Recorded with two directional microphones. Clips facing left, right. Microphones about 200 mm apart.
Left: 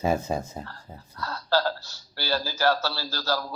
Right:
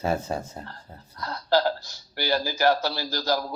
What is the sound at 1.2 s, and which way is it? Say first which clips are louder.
Speech: right 2 dB; 15° right (ahead or behind).